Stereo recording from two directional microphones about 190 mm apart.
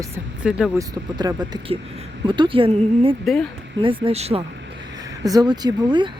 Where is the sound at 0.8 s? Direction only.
20° right (ahead or behind).